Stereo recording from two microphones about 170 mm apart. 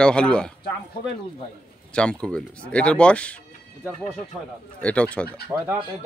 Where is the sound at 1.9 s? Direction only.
5° left (ahead or behind).